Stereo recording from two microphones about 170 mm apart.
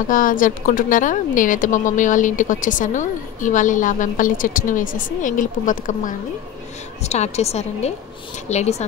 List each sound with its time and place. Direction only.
0.1 s a woman's voice: 50° left (ahead or behind)